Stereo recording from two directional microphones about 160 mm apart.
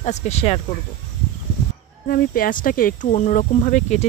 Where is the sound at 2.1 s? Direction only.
65° left (ahead or behind); by 4.0 s 50° left (ahead or behind).